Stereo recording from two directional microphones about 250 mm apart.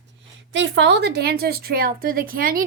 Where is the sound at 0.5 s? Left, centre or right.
Right.